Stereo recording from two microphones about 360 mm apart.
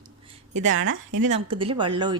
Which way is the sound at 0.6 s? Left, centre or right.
Right.